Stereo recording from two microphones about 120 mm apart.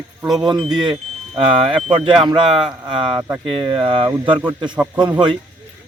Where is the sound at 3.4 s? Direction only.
50° right (ahead or behind).